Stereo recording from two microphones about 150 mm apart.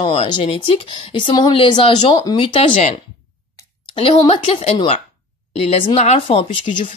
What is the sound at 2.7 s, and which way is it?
Speech, 50° left (ahead or behind).